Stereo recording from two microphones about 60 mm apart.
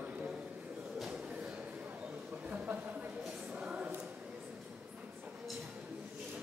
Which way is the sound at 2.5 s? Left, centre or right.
Right.